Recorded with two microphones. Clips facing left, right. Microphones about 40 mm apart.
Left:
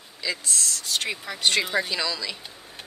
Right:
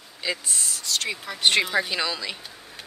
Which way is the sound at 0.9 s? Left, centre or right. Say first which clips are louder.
Right 1 dB; centre.